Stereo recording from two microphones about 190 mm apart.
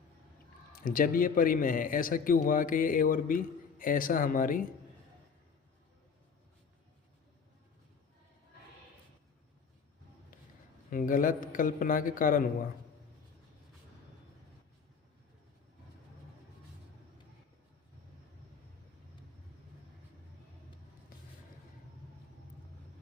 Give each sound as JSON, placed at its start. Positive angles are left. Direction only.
{"t": 0.8, "sound": "speech", "side_deg": 45}
{"t": 10.8, "sound": "speech", "side_deg": 45}